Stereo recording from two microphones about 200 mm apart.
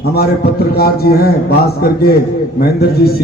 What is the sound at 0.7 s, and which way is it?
Speech, 50° left (ahead or behind).